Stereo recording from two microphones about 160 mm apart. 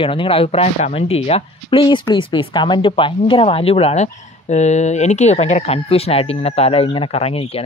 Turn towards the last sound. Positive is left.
turn(degrees=40)  # may be behind; listen again after turning